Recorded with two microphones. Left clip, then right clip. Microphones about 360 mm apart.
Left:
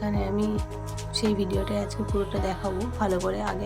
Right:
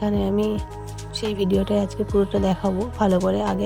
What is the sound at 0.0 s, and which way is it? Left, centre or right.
Music, centre.